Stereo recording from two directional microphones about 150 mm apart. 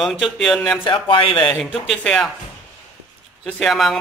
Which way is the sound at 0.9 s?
35° left (ahead or behind).